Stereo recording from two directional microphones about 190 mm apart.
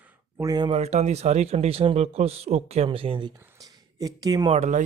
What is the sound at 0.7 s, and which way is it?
Speech, 35° right (ahead or behind).